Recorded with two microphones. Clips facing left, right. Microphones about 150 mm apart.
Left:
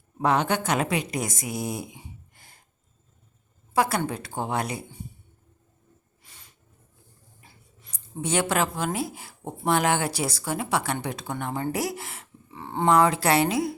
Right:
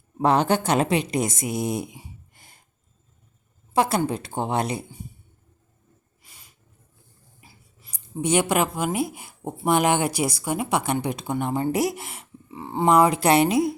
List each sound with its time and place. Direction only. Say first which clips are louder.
0.2 s a woman's voice: right 3 dB; 30° right (ahead or behind)
2.0 s a sound: right 1 dB; 20° right (ahead or behind)
3.8 s a woman's voice: right 3 dB; 25° right (ahead or behind)
6.2 s a sound: even; 10° right (ahead or behind)
9.6 s a woman's voice: right 3 dB; 15° right (ahead or behind)
12.5 s a woman's voice: right 2 dB; 10° right (ahead or behind)